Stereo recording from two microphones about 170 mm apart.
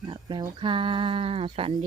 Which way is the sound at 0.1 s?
25° right (ahead or behind).